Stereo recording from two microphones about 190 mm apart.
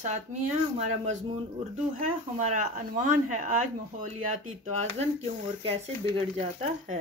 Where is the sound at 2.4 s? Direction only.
40° right (ahead or behind).